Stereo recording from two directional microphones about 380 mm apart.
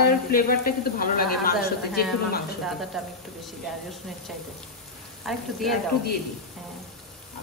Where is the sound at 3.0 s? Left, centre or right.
Centre.